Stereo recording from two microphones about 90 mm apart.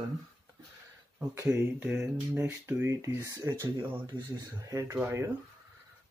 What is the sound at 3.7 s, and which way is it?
Speech, 50° right (ahead or behind).